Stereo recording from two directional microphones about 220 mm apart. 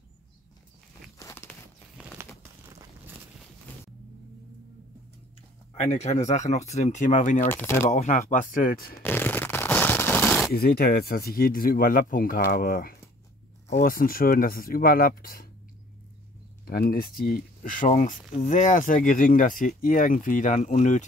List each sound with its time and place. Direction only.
1.1 s walk: 15° left (ahead or behind)
2.2 s crumpling: 10° right (ahead or behind)
5.8 s speech: 30° left (ahead or behind)
7.4 s speech: 10° left (ahead or behind)
7.9 s speech: 35° left (ahead or behind)
9.0 s shuffling cards: 10° left (ahead or behind)
10.5 s speech: 45° left (ahead or behind)
16.6 s speech: 40° left (ahead or behind)